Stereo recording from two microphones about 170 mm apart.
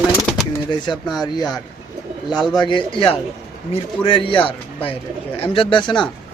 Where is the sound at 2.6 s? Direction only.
30° left (ahead or behind).